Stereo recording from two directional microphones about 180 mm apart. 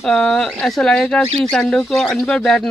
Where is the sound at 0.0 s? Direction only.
Centre (ahead or behind).